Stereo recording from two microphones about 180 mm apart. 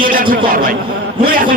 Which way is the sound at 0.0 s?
50° right (ahead or behind).